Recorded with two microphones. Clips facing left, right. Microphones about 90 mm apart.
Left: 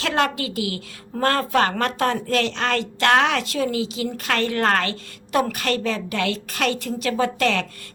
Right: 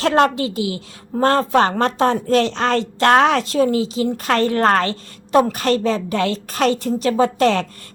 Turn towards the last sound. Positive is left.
turn(degrees=-35)  # may be behind; listen again after turning